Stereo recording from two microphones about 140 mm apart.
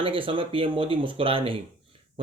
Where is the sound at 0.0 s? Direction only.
40° right (ahead or behind).